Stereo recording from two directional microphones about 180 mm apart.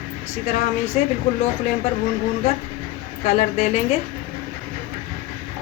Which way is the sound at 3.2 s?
40° left (ahead or behind).